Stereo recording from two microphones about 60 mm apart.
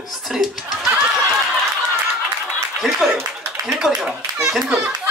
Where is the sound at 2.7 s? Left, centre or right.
Centre.